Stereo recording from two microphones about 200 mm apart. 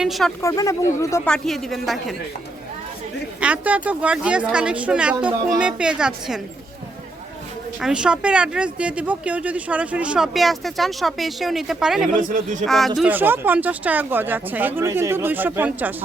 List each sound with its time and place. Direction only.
0.0 s speech: centre (ahead or behind)
0.4 s speech: 15° left (ahead or behind); by 2.1 s centre (ahead or behind)
3.4 s speech: 5° right (ahead or behind)
7.8 s speech: 5° right (ahead or behind)
12.2 s speech: 40° right (ahead or behind)
12.6 s speech: centre (ahead or behind)